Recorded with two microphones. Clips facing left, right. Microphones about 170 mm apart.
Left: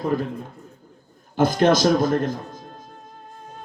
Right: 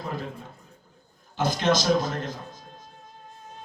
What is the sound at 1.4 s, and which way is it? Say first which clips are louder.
Speech: left 7 dB; 50° left (ahead or behind).